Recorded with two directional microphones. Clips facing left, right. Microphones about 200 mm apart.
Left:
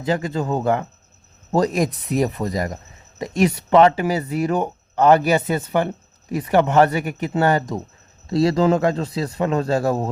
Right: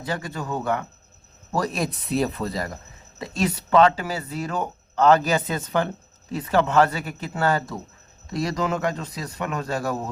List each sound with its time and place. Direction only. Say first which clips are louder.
0.0 s a man's voice: left 8 dB; 20° left (ahead or behind)
8.3 s a man's voice: left 9 dB; 30° left (ahead or behind)